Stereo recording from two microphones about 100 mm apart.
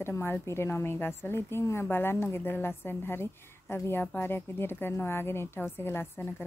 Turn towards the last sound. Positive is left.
turn(degrees=20)  # may be behind; listen again after turning